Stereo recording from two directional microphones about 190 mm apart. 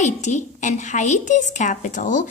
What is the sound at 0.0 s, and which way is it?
A woman's voice, 40° left (ahead or behind).